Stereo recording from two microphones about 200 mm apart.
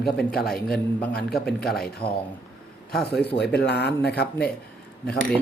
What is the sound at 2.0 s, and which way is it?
Speech, 25° left (ahead or behind).